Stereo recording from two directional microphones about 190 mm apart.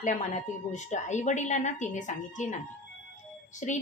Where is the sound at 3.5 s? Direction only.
40° left (ahead or behind).